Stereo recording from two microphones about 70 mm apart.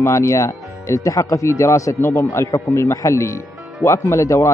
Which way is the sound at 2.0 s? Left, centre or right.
Left.